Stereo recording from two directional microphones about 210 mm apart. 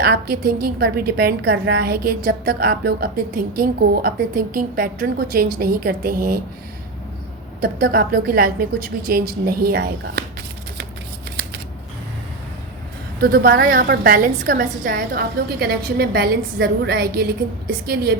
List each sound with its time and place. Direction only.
0.0 s a woman's voice: 50° right (ahead or behind)
7.6 s a woman's voice: 45° right (ahead or behind)
13.2 s a woman's voice: 45° right (ahead or behind)